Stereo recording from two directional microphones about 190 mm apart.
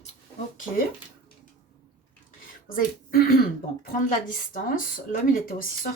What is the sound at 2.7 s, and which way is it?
A woman's voice, 50° left (ahead or behind).